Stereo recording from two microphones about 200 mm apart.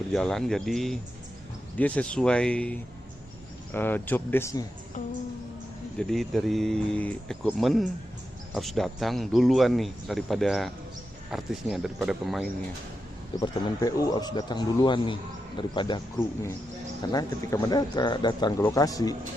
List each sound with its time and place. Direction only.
0.1 s speech: centre (ahead or behind)
6.0 s speech: centre (ahead or behind)
13.4 s a man's voice: 15° left (ahead or behind)
17.1 s a man's voice: 20° left (ahead or behind)